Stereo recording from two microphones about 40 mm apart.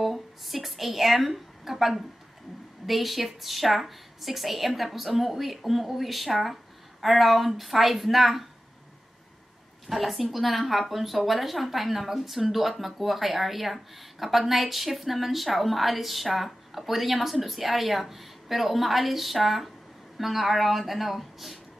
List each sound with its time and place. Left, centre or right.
0.0 s a sound: centre
2.9 s a woman's voice: centre
9.8 s a woman's voice: centre